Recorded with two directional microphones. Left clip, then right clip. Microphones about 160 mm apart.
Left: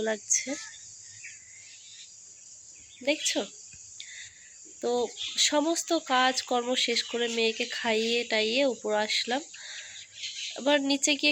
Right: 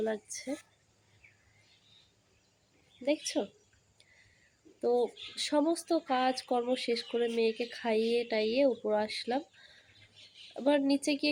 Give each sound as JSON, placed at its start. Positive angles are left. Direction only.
{"t": 0.0, "sound": "speech", "side_deg": 20}
{"t": 3.0, "sound": "speech", "side_deg": 10}
{"t": 3.9, "sound": "cricket", "side_deg": 5}
{"t": 4.8, "sound": "speech", "side_deg": 5}